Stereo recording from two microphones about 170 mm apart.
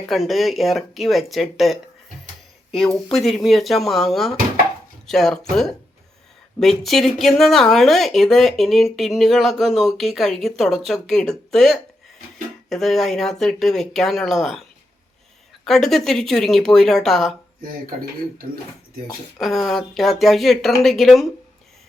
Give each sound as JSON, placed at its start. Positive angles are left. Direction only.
{"t": 0.1, "sound": "speech", "side_deg": 0}
{"t": 15.6, "sound": "speech", "side_deg": 0}
{"t": 19.4, "sound": "speech", "side_deg": 0}